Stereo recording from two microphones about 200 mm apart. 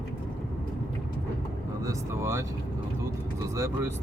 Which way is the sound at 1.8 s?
15° right (ahead or behind).